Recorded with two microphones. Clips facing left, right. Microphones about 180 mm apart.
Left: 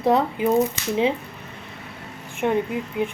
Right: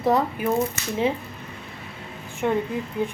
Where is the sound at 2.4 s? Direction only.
20° left (ahead or behind).